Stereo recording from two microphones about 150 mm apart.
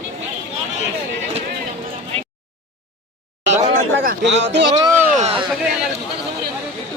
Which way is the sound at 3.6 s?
65° right (ahead or behind).